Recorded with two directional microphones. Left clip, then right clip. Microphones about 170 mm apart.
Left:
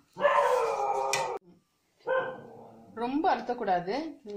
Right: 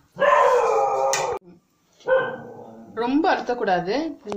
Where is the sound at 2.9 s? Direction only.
20° left (ahead or behind).